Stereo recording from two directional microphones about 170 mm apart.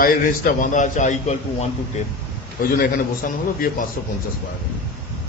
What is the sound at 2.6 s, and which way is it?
Speech, 55° left (ahead or behind).